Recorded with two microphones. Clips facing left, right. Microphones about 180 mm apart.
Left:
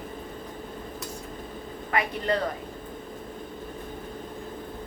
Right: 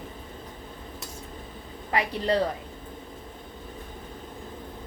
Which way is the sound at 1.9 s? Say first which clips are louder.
Right 1 dB; 30° right (ahead or behind).